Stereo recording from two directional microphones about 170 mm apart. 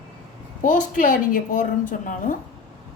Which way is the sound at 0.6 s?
50° left (ahead or behind).